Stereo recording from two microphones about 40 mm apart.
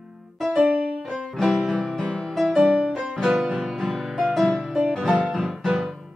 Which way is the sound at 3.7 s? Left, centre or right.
Centre.